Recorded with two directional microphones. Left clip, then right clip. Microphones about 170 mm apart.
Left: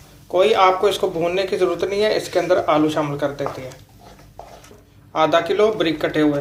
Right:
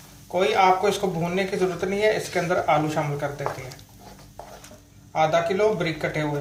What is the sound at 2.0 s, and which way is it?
Speech, 40° left (ahead or behind).